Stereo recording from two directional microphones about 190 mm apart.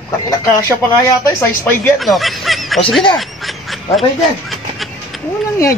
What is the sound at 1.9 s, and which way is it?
Speech, centre (ahead or behind).